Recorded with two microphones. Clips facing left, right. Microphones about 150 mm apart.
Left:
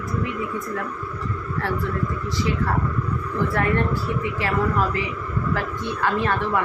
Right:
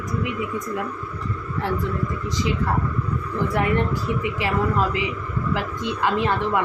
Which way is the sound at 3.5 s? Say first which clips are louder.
Right 1 dB; 15° right (ahead or behind).